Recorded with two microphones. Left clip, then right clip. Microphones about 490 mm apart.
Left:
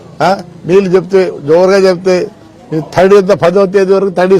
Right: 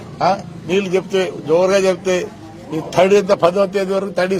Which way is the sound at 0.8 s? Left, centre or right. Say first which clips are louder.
Left 9 dB; left.